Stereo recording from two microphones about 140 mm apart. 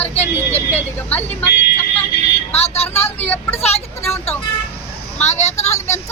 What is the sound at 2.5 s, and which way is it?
Speech, 45° left (ahead or behind).